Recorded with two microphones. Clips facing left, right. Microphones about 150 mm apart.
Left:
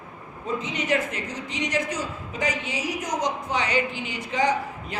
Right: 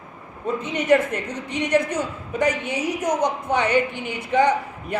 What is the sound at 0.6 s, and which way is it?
A woman's voice, 60° right (ahead or behind).